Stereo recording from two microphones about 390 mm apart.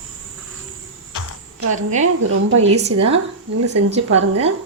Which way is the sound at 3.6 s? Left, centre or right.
Right.